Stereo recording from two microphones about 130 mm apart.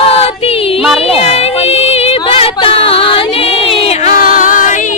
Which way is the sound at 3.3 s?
45° left (ahead or behind).